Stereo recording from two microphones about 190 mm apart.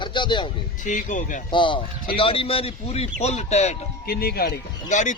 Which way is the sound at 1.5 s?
25° left (ahead or behind).